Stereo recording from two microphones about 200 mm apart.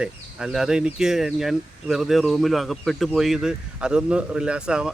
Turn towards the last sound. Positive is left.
turn(degrees=-5)  # may be behind; listen again after turning